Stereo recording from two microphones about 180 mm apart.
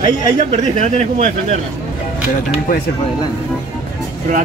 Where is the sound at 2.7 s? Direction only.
50° left (ahead or behind).